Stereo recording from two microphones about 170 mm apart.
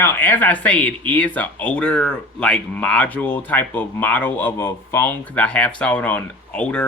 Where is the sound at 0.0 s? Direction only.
10° left (ahead or behind).